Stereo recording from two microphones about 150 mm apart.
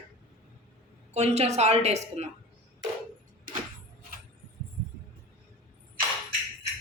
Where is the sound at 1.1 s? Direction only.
45° right (ahead or behind).